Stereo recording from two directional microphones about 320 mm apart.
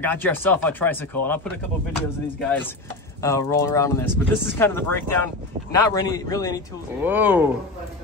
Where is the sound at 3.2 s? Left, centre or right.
Centre.